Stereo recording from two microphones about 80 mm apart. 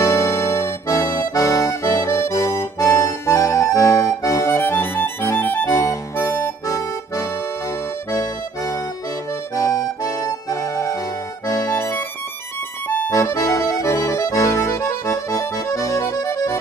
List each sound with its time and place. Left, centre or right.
0.0 s accordion: left
5.4 s music: left
5.7 s music: left
8.1 s accordion: left
12.8 s music: left
13.1 s accordion: left